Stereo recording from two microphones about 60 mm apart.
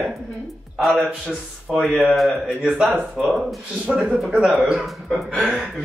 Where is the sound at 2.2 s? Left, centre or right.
Centre.